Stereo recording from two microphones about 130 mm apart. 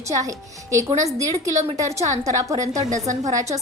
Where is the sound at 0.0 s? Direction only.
25° right (ahead or behind).